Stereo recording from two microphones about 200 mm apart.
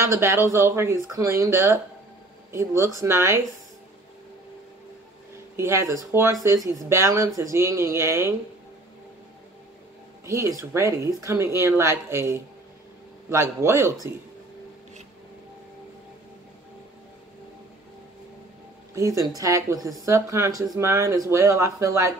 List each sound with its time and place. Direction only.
0.0 s speech: 15° right (ahead or behind)
5.6 s speech: 15° right (ahead or behind)
10.2 s speech: 15° right (ahead or behind)
18.9 s speech: 15° right (ahead or behind)